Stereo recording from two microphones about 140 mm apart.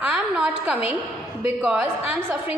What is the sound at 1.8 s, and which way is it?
Speech, 15° right (ahead or behind).